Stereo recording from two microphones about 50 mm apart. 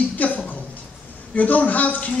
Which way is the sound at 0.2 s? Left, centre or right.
Left.